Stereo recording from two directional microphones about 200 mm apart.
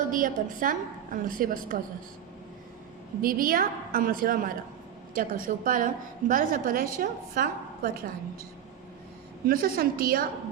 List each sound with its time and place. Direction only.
0.1 s a woman's voice: 40° right (ahead or behind)
3.2 s a woman's voice: 45° right (ahead or behind)
9.5 s a woman's voice: 45° right (ahead or behind)